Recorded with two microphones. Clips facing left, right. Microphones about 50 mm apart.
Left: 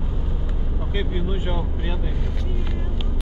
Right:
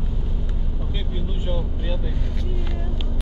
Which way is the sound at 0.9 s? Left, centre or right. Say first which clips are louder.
Left 7 dB; left.